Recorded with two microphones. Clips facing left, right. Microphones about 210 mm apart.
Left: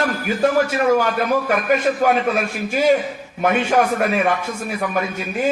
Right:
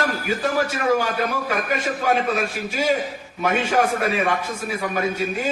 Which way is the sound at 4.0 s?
45° left (ahead or behind).